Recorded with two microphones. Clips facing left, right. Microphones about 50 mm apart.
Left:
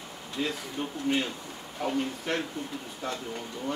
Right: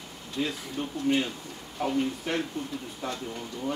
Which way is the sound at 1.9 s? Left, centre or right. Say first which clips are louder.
Right 2 dB; centre.